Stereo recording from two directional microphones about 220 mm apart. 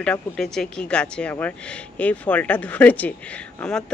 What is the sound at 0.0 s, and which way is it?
Speech, 5° left (ahead or behind).